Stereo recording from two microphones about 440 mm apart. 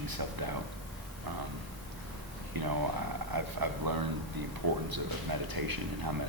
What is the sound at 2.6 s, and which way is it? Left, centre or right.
Speech, right.